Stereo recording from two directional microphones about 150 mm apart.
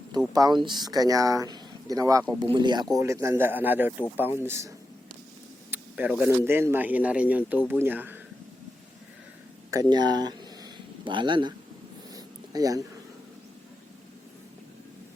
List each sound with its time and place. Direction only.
0.3 s speech: 30° right (ahead or behind)
2.9 s speech: 20° right (ahead or behind)
5.7 s speech: 10° right (ahead or behind)
9.9 s speech: 30° right (ahead or behind)
12.1 s a sound: 25° right (ahead or behind)